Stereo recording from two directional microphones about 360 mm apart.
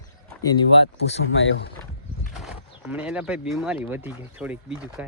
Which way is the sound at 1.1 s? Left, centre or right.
Left.